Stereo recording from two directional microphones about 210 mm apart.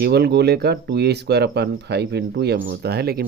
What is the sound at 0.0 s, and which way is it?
Speech, 50° right (ahead or behind).